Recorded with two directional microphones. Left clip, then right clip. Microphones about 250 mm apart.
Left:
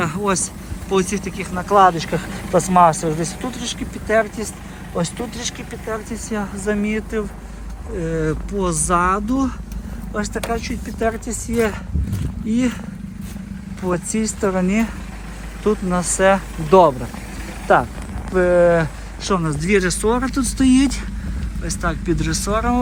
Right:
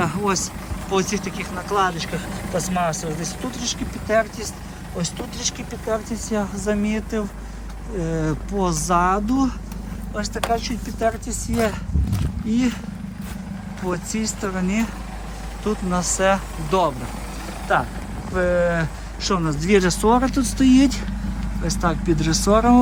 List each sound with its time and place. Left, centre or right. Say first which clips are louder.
0.0 s vehicle: left 2 dB; centre
0.9 s speech: left 2 dB; centre
6.3 s speech: left 1 dB; centre
13.8 s speech: left 4 dB; centre
16.6 s speech: left 8 dB; centre